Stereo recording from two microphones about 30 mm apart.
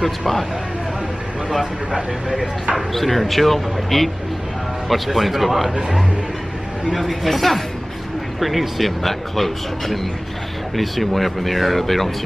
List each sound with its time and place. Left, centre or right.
0.0 s speech: centre
1.9 s speech: right
2.9 s speech: centre
6.9 s speech: centre